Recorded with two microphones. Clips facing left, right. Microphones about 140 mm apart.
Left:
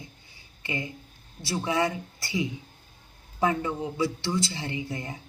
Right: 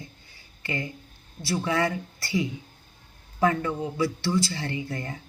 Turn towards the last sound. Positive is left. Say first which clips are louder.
# right 1 dB
turn(degrees=20)  # may be behind; listen again after turning